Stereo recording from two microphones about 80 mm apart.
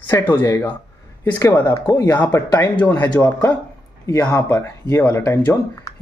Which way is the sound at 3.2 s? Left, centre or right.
Left.